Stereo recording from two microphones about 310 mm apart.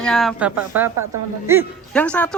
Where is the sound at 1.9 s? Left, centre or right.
Centre.